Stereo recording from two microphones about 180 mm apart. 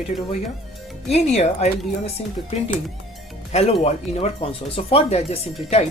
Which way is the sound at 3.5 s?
35° left (ahead or behind).